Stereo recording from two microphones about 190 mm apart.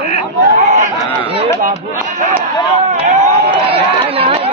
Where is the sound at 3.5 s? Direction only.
30° right (ahead or behind).